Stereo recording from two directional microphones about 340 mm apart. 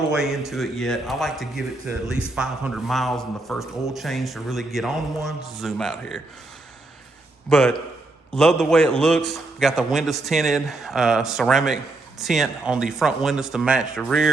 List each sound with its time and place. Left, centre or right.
0.2 s a man's voice: centre
7.5 s a man's voice: centre